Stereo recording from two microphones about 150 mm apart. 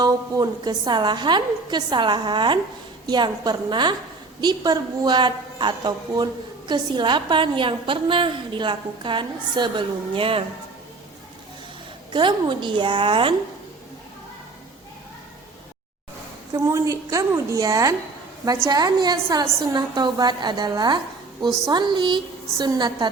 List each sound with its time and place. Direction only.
0.0 s a woman's voice: 25° right (ahead or behind)
12.1 s a woman's voice: 30° right (ahead or behind)
16.6 s a woman's voice: 20° right (ahead or behind)